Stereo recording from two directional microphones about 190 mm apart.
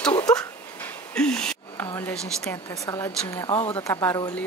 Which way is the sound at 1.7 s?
20° left (ahead or behind).